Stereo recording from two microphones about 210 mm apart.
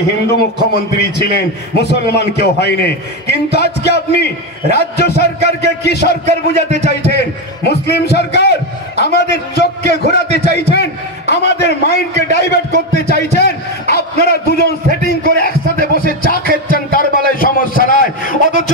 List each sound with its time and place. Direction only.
0.3 s a man's voice: 50° left (ahead or behind)
6.2 s a man's voice: 35° right (ahead or behind)
7.6 s a man's voice: 50° left (ahead or behind)